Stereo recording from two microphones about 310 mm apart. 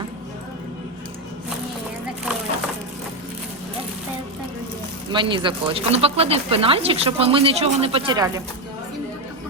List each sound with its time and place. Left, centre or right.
5.1 s speech: centre